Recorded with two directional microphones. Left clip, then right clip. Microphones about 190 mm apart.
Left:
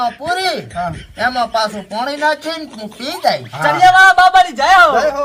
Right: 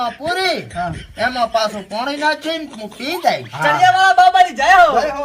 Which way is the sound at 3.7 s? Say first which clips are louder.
Left 4 dB; 10° right (ahead or behind).